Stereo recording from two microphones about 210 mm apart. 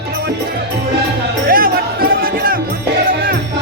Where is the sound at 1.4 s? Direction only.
45° right (ahead or behind).